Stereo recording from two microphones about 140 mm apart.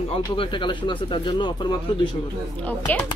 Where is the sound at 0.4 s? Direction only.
35° left (ahead or behind).